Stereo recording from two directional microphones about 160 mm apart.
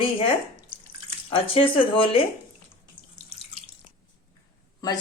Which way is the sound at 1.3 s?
35° left (ahead or behind).